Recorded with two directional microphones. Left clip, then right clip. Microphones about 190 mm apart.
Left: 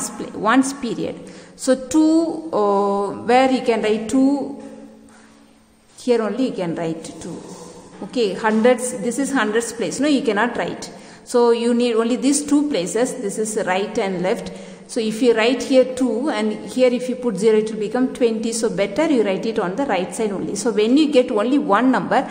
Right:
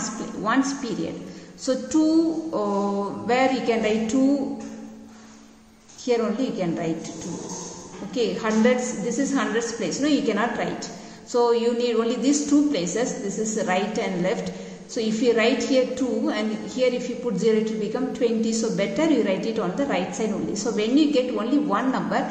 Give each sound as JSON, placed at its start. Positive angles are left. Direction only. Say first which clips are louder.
{"t": 0.4, "sound": "a woman's voice", "louder": "left 6 dB", "side_deg": 40}
{"t": 6.0, "sound": "a woman's voice", "louder": "left 4 dB", "side_deg": 35}
{"t": 8.1, "sound": "a woman's voice", "louder": "left 5 dB", "side_deg": 35}